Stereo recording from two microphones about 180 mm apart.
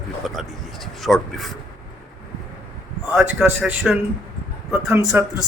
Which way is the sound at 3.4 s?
5° right (ahead or behind).